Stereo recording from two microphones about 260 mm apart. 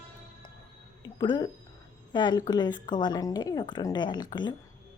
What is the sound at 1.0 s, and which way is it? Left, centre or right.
Speech, centre.